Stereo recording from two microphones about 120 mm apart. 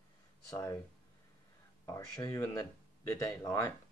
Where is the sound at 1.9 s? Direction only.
30° left (ahead or behind).